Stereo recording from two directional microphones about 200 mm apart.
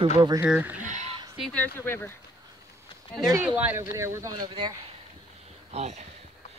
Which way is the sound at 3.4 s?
10° right (ahead or behind).